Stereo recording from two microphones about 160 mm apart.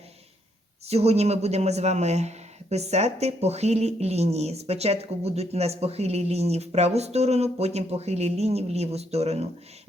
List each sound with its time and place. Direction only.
0.9 s speech: 40° right (ahead or behind)